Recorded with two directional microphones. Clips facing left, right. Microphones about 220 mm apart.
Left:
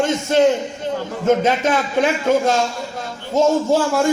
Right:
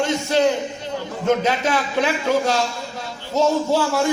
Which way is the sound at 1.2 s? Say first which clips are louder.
Left 3 dB; 50° left (ahead or behind).